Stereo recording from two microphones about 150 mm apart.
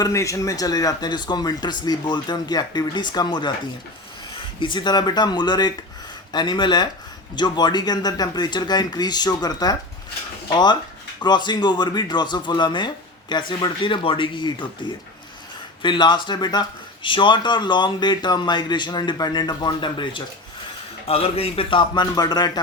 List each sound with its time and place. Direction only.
0.0 s speech: 20° left (ahead or behind)
4.6 s speech: 30° left (ahead or behind)